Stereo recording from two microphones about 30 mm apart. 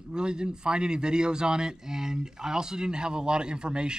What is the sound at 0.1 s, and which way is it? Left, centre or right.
A man's voice, right.